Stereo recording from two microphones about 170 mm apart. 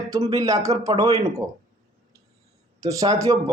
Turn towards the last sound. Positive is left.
turn(degrees=-20)  # may be behind; listen again after turning